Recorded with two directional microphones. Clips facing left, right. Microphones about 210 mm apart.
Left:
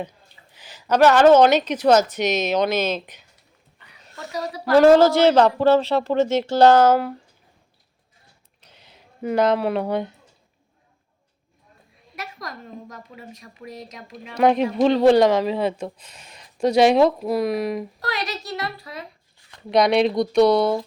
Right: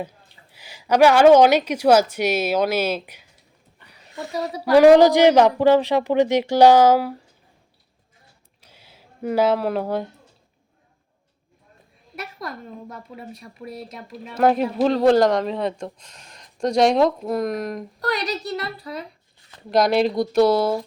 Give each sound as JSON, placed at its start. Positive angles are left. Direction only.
{"t": 0.5, "sound": "a woman's voice", "side_deg": -10}
{"t": 4.6, "sound": "a woman's voice", "side_deg": -15}
{"t": 8.6, "sound": "a sound", "side_deg": -10}
{"t": 9.2, "sound": "speech", "side_deg": -5}
{"t": 12.2, "sound": "a woman's voice", "side_deg": -30}
{"t": 14.3, "sound": "speech", "side_deg": -5}
{"t": 19.7, "sound": "speech", "side_deg": 0}